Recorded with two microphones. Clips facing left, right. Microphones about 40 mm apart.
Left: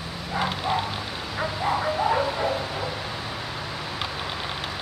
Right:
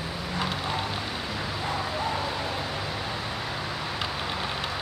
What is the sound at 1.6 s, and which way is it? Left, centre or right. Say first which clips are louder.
Bow-wow: left 7 dB; centre.